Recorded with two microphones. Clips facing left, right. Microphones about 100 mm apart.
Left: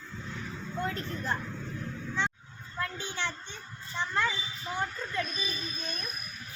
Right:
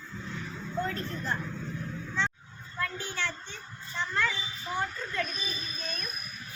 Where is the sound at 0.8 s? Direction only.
15° left (ahead or behind).